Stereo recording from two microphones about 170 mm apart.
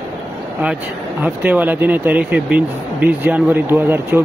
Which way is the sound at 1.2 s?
10° right (ahead or behind).